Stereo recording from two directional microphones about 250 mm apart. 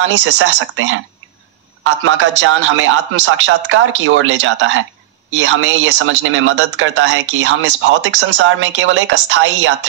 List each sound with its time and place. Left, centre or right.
0.0 s speech: right
2.0 s speech: right